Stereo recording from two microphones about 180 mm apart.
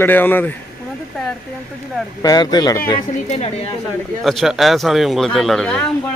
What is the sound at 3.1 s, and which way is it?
Speech, 40° left (ahead or behind).